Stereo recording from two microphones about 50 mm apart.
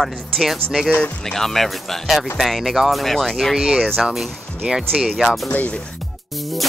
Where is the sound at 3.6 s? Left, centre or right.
Centre.